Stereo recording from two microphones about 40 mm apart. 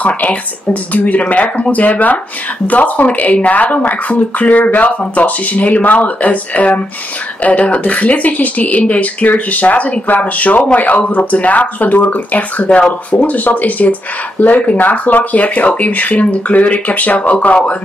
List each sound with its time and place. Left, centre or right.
0.2 s speech: left